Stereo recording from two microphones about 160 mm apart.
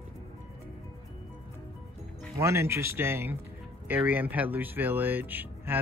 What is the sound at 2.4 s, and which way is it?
Speech, 15° right (ahead or behind).